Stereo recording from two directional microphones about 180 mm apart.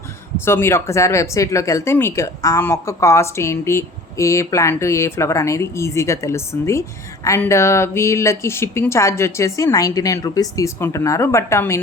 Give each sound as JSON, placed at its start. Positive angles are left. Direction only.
{"t": 0.4, "sound": "speech", "side_deg": 15}